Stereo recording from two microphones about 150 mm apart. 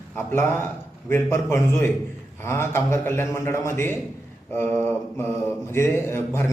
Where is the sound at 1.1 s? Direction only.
15° left (ahead or behind).